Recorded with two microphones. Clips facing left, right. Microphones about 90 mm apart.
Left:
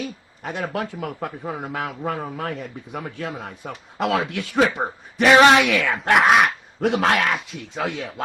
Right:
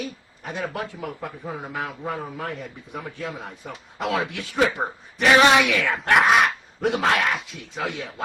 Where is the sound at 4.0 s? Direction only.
65° left (ahead or behind).